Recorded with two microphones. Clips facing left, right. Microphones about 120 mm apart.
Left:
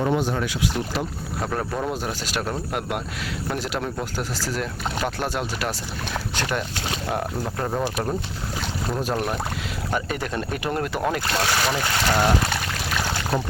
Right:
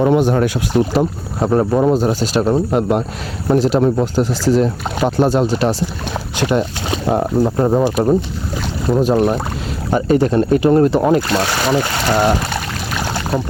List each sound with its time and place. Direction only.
0.0 s speech: 65° right (ahead or behind); by 1.0 s 45° right (ahead or behind)
1.4 s speech: 30° right (ahead or behind)
8.9 s speech: 20° right (ahead or behind)